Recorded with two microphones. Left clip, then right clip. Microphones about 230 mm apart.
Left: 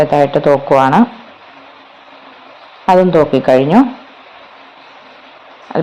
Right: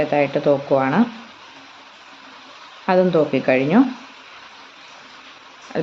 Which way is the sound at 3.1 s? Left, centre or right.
Left.